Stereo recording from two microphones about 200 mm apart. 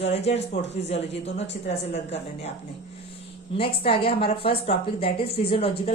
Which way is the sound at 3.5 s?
30° left (ahead or behind).